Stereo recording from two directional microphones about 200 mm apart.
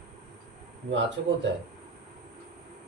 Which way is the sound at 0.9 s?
65° right (ahead or behind).